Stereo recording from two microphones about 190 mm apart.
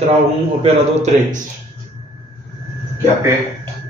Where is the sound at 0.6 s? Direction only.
35° right (ahead or behind).